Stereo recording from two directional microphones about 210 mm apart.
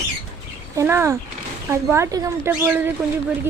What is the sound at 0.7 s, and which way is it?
A woman's voice, 10° right (ahead or behind).